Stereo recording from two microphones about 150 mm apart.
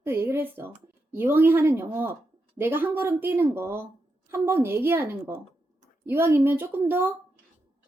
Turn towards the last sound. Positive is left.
turn(degrees=-15)  # may be behind; listen again after turning